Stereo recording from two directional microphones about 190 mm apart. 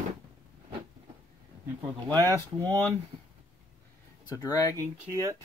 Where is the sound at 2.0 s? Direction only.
10° left (ahead or behind).